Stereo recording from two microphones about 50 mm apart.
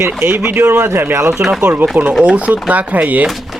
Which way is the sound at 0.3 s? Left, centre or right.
Right.